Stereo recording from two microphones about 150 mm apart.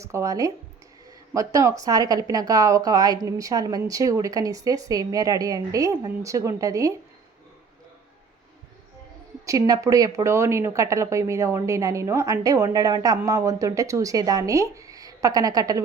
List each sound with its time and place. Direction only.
0.0 s speech: 20° right (ahead or behind)
9.5 s speech: 25° right (ahead or behind)